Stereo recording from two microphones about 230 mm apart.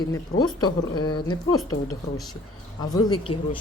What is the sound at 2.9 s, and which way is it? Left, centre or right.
Speech, left.